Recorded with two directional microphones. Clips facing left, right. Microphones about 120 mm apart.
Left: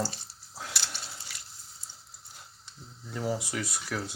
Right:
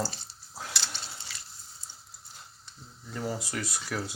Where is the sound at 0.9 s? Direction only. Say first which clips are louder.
Right 1 dB; 10° left (ahead or behind).